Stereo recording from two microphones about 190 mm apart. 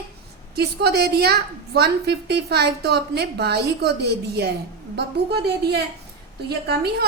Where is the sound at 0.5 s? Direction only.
60° right (ahead or behind).